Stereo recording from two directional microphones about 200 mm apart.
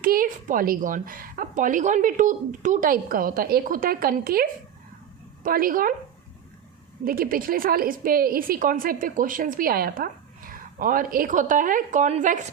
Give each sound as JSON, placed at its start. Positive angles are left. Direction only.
{"t": 0.0, "sound": "a woman's voice", "side_deg": -45}
{"t": 7.0, "sound": "a woman's voice", "side_deg": -45}